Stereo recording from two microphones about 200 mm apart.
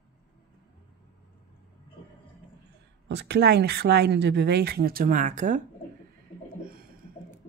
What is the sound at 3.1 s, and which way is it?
Speech, 60° right (ahead or behind).